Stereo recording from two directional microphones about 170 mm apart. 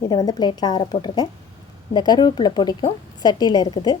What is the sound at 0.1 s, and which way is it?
A woman's voice, 25° left (ahead or behind).